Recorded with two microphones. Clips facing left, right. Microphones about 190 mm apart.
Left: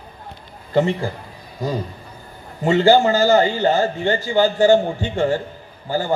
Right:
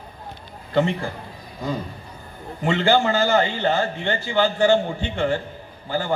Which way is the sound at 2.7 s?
40° left (ahead or behind).